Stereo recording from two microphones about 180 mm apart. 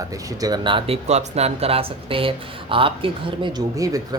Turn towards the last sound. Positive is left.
turn(degrees=-20)  # may be behind; listen again after turning